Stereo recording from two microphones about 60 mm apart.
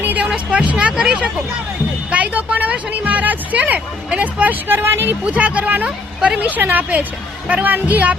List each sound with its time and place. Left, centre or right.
0.0 s a sound: right
0.5 s speech: right
4.8 s speech: right
5.2 s speech: right